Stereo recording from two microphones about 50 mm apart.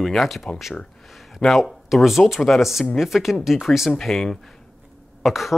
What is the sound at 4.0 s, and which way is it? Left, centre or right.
Speech, centre.